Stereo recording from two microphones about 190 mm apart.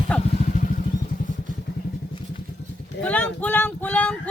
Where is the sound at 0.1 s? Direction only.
5° left (ahead or behind).